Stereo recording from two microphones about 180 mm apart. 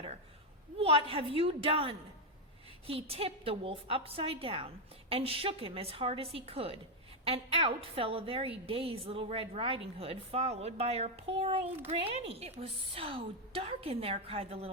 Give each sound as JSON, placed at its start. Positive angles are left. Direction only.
{"t": 0.8, "sound": "a woman's voice", "side_deg": -30}